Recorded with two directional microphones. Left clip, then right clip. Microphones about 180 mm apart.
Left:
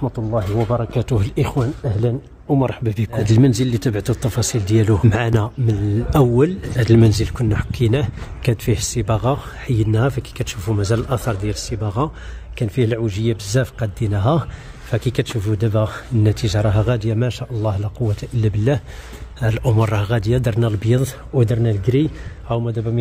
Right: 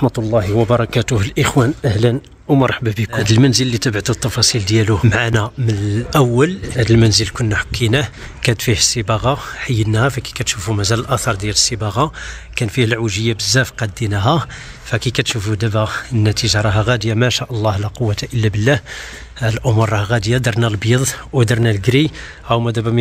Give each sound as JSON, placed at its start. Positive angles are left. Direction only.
{"t": 0.9, "sound": "speech", "side_deg": 0}
{"t": 1.5, "sound": "speech", "side_deg": -45}
{"t": 2.6, "sound": "speech", "side_deg": 0}
{"t": 21.4, "sound": "speech", "side_deg": -15}